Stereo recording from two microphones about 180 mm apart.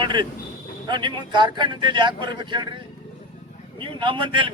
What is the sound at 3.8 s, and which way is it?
Speech, 30° right (ahead or behind).